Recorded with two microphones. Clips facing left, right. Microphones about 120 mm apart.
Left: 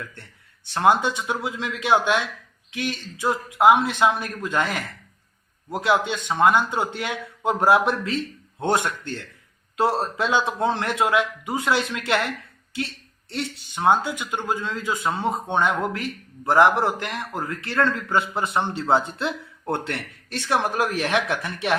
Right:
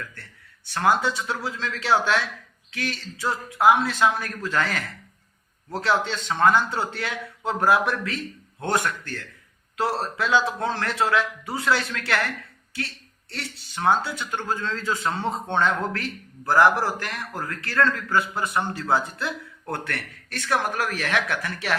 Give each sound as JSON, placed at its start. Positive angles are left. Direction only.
{"t": 0.0, "sound": "speech", "side_deg": 25}